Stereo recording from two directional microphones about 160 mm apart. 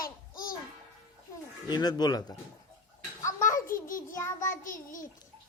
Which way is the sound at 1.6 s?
25° left (ahead or behind).